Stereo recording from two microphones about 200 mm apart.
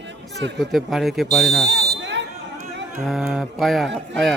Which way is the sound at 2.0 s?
60° right (ahead or behind).